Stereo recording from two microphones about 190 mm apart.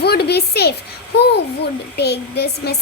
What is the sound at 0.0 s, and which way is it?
A woman's voice, 60° left (ahead or behind).